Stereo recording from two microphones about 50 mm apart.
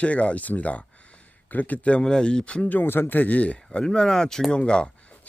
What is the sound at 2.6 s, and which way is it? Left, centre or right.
Speech, left.